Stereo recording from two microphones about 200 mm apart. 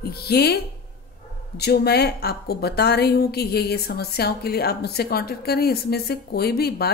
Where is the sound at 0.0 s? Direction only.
50° left (ahead or behind).